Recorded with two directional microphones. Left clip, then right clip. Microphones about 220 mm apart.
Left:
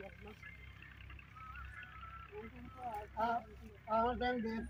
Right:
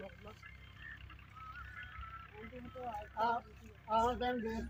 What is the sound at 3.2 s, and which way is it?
Speech, 5° right (ahead or behind).